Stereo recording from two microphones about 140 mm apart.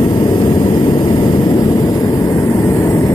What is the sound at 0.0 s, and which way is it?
Vehicle, 30° left (ahead or behind).